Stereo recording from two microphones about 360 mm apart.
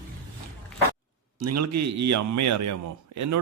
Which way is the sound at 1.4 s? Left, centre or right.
Right.